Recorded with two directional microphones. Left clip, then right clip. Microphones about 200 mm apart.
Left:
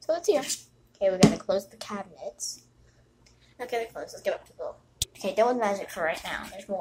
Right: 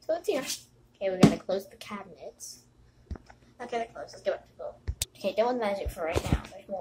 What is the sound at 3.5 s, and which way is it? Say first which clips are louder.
A woman's voice: left 2 dB; 15° left (ahead or behind).